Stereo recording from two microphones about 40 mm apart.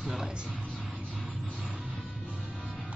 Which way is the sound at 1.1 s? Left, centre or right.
Centre.